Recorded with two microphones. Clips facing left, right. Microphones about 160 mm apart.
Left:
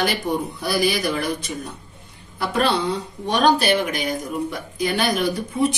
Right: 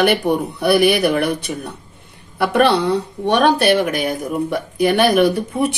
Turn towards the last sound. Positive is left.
turn(degrees=-65)  # may be behind; listen again after turning